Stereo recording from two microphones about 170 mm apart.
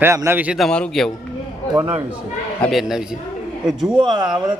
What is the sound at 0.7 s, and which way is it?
Speech, 5° left (ahead or behind).